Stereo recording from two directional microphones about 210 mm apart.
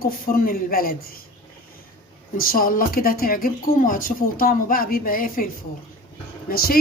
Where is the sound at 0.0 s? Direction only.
45° left (ahead or behind).